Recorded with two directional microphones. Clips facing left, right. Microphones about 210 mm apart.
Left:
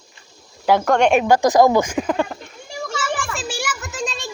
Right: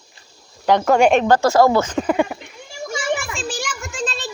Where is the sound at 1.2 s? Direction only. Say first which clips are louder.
Even; 10° left (ahead or behind).